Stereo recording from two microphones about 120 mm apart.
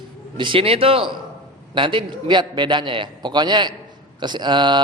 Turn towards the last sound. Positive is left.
turn(degrees=-40)  # may be behind; listen again after turning